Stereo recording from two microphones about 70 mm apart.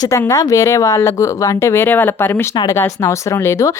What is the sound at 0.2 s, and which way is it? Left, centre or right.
Speech, left.